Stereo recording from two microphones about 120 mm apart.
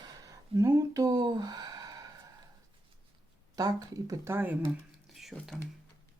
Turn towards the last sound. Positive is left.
turn(degrees=0)  # may be behind; listen again after turning